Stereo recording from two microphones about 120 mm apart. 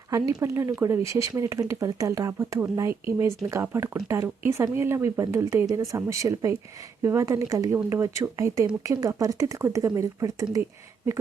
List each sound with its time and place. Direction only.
0.4 s speech: 20° right (ahead or behind)